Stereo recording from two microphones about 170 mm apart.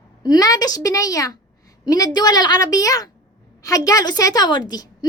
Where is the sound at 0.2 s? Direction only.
20° left (ahead or behind).